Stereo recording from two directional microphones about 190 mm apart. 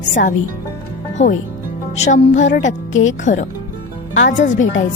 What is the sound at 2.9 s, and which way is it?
Speech, 90° left.